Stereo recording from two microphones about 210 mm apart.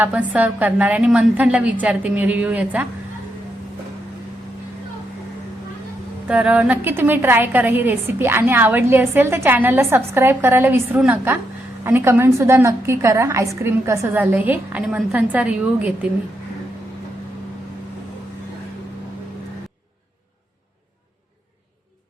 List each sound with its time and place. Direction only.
0.0 s a woman's voice: 5° right (ahead or behind)
6.2 s a woman's voice: 5° right (ahead or behind)